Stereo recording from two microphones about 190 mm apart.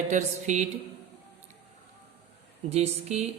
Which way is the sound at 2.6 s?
35° right (ahead or behind).